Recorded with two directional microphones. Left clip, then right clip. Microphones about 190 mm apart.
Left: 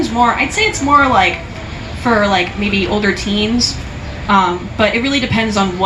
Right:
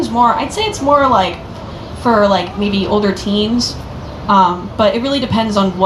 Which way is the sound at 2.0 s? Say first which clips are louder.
Right 2 dB; 50° right (ahead or behind).